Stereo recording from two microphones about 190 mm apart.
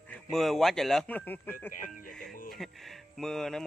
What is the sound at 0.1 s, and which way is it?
Speech, centre (ahead or behind).